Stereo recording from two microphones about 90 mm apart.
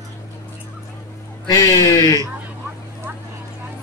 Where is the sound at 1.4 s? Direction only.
45° left (ahead or behind).